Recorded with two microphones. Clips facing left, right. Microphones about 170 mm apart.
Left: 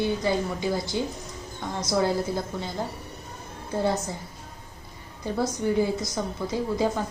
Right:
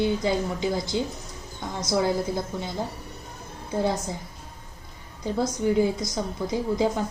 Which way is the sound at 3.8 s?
15° right (ahead or behind).